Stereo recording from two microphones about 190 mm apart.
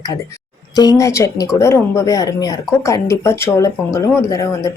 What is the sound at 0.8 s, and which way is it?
A woman's voice, 20° left (ahead or behind).